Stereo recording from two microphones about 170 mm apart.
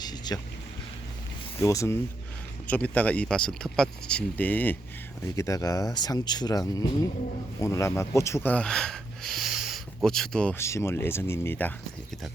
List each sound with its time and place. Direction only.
0.0 s vehicle: 25° left (ahead or behind)
1.5 s speech: 20° left (ahead or behind)